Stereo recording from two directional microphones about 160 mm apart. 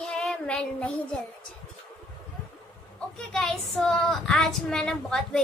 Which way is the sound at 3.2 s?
5° left (ahead or behind).